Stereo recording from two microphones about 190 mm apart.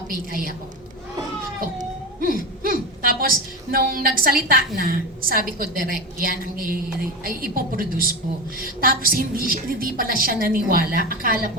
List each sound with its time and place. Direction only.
1.8 s a woman's voice: 50° right (ahead or behind)